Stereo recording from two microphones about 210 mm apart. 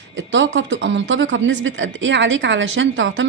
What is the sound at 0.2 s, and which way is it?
Speech, 65° right (ahead or behind).